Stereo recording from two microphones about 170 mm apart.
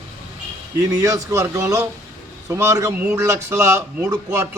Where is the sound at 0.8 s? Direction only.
20° right (ahead or behind).